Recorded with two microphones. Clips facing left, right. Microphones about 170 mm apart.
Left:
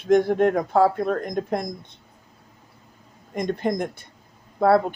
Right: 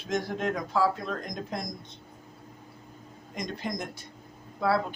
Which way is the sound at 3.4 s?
55° left (ahead or behind).